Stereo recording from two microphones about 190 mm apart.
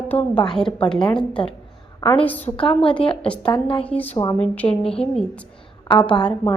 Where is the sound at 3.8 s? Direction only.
5° left (ahead or behind).